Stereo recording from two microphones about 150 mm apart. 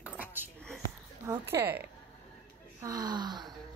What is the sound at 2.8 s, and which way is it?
Speech, 25° right (ahead or behind).